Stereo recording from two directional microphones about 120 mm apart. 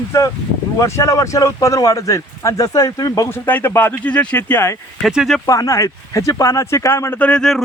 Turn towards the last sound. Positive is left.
turn(degrees=5)  # may be behind; listen again after turning